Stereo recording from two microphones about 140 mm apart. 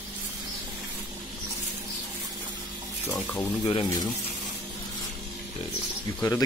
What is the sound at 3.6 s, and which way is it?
Speech, 35° left (ahead or behind).